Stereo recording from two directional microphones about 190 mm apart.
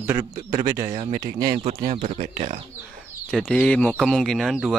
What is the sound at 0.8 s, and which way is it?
Speech, 35° right (ahead or behind).